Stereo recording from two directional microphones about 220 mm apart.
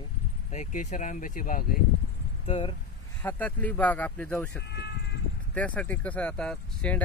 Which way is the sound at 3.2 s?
10° left (ahead or behind).